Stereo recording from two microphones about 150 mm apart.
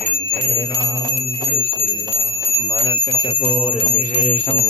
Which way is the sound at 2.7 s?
35° left (ahead or behind).